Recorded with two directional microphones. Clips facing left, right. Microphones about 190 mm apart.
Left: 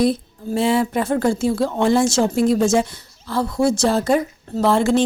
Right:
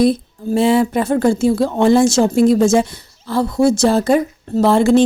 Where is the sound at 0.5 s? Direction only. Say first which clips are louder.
Right 4 dB; 20° right (ahead or behind).